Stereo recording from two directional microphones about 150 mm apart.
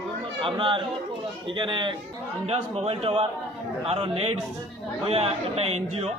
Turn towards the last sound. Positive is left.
turn(degrees=-45)  # may be behind; listen again after turning